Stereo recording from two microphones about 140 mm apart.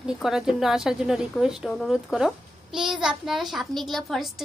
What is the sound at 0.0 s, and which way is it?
A woman's voice, 5° right (ahead or behind).